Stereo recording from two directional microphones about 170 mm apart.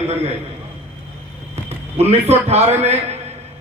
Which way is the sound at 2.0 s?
40° right (ahead or behind).